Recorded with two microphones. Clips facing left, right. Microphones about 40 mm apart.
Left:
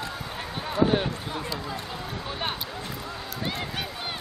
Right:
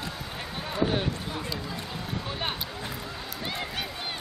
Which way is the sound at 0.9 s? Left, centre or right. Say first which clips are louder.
Left 3 dB; centre.